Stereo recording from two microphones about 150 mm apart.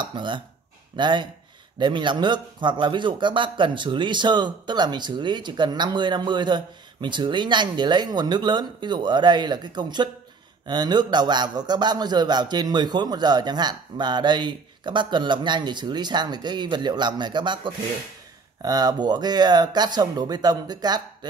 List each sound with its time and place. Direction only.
0.0 s a man's voice: 30° right (ahead or behind)